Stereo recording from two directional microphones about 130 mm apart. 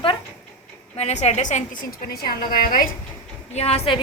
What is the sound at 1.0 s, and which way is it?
Speech, 55° left (ahead or behind).